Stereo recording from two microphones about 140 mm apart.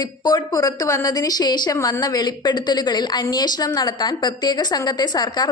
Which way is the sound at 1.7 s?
20° left (ahead or behind).